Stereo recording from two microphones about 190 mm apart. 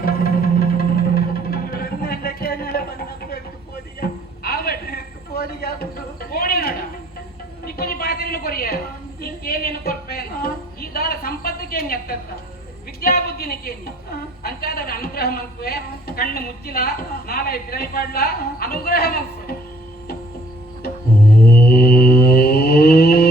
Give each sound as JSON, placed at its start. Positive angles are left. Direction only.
{"t": 0.0, "sound": "music", "side_deg": 50}
{"t": 4.0, "sound": "a sound", "side_deg": 50}
{"t": 7.6, "sound": "a woman's voice", "side_deg": 50}
{"t": 21.4, "sound": "a woman's voice", "side_deg": 50}